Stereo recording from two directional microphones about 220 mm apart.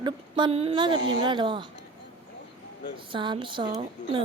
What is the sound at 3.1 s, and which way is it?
Speech, 20° right (ahead or behind).